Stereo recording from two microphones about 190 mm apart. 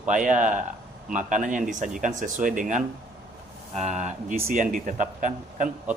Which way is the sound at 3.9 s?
40° right (ahead or behind).